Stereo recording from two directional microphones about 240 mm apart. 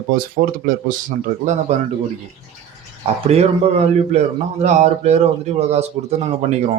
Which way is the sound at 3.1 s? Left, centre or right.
Right.